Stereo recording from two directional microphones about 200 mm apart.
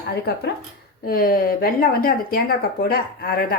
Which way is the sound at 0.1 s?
55° left (ahead or behind).